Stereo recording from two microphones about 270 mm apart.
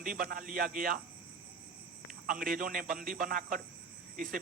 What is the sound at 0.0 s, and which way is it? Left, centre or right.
Speech, right.